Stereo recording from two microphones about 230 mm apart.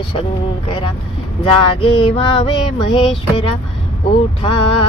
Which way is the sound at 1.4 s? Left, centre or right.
Left.